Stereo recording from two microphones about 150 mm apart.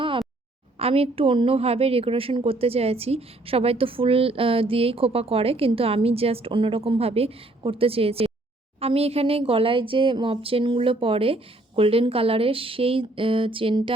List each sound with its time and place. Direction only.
0.8 s a woman's voice: 40° right (ahead or behind)